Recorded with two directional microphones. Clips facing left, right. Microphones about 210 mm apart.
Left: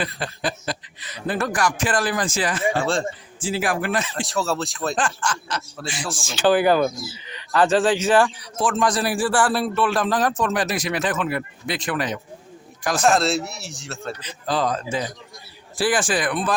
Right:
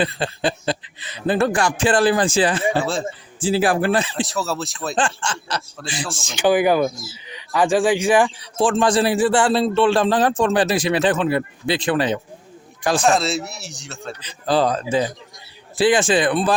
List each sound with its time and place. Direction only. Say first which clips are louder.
0.0 s a man's voice: right 5 dB; 30° right (ahead or behind)
2.7 s a man's voice: right 1 dB; 5° right (ahead or behind)
3.4 s speech: right 6 dB; 35° right (ahead or behind)
4.2 s a man's voice: even; centre (ahead or behind)
4.9 s a man's voice: right 2 dB; 30° right (ahead or behind)
6.1 s speech: right 1 dB; 15° right (ahead or behind)
8.5 s a man's voice: right 5 dB; 30° right (ahead or behind)
13.0 s a man's voice: left 2 dB; centre (ahead or behind)
14.2 s speech: right 6 dB; 30° right (ahead or behind)
15.7 s a man's voice: right 5 dB; 25° right (ahead or behind)